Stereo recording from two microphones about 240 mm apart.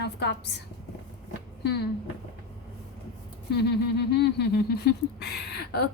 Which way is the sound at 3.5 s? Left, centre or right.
Left.